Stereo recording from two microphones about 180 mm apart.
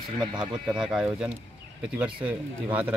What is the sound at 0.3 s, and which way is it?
Speech, 25° right (ahead or behind).